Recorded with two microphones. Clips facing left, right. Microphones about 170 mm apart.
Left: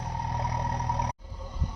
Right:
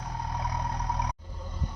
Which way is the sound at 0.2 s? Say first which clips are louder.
Left 1 dB; 65° left (ahead or behind).